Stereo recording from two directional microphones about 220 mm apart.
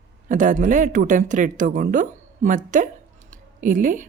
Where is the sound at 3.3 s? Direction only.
35° right (ahead or behind).